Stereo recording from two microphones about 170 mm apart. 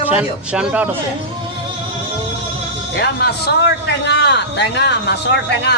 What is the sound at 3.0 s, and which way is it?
A man's voice, 70° left (ahead or behind).